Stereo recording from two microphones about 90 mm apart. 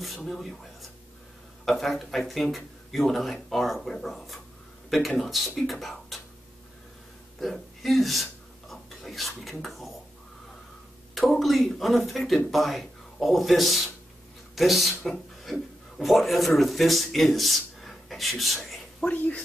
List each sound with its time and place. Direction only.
0.0 s speech: centre (ahead or behind)
1.7 s speech: centre (ahead or behind)
4.8 s a sound: centre (ahead or behind)
5.2 s speech: centre (ahead or behind)
7.3 s speech: centre (ahead or behind)
11.1 s speech: centre (ahead or behind)
19.0 s speech: 15° left (ahead or behind)